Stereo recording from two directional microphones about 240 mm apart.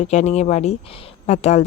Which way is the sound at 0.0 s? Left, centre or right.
Left.